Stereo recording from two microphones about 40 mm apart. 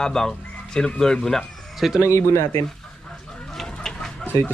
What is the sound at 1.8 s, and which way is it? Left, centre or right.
Speech, centre.